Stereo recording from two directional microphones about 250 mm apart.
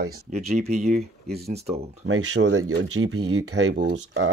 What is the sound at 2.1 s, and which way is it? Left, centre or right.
Speech, right.